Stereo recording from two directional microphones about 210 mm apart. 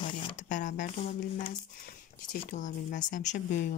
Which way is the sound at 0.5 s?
35° left (ahead or behind).